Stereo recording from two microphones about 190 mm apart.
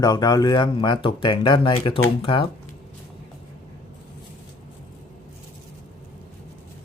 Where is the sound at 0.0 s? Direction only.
20° left (ahead or behind).